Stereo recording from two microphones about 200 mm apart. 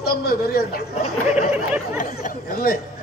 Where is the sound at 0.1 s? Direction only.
50° left (ahead or behind).